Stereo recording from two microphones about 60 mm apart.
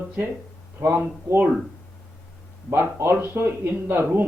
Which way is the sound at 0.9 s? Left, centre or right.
Right.